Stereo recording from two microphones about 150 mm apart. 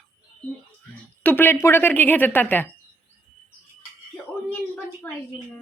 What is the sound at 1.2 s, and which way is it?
Speech, 15° left (ahead or behind).